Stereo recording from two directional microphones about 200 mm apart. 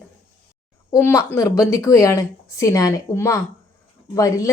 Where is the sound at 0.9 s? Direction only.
15° left (ahead or behind).